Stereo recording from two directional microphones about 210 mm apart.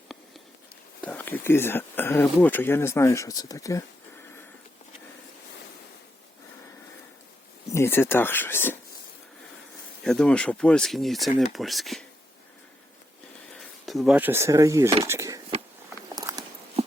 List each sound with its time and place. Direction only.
1.0 s speech: 10° left (ahead or behind)
7.7 s speech: 10° left (ahead or behind)
10.0 s speech: 5° left (ahead or behind)
13.8 s speech: centre (ahead or behind)
16.1 s a sound: 20° right (ahead or behind)